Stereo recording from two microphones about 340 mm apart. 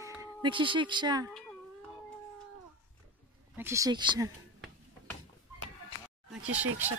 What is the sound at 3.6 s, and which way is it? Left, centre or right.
Speech, centre.